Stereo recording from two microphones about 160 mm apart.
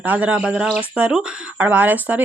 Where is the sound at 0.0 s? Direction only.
10° right (ahead or behind).